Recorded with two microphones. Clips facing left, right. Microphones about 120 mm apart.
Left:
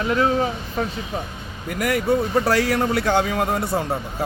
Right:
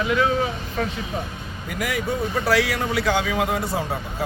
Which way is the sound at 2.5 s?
45° left (ahead or behind).